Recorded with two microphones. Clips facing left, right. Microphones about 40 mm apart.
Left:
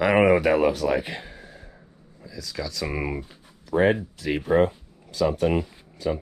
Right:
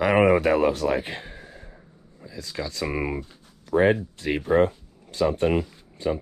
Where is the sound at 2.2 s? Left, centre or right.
Right.